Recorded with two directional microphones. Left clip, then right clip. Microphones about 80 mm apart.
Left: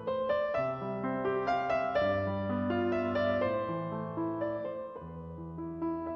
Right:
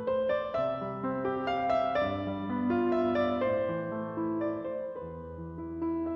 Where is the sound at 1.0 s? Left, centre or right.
Centre.